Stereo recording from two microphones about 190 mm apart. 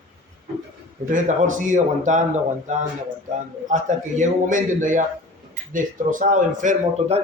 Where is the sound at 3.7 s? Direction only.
40° right (ahead or behind).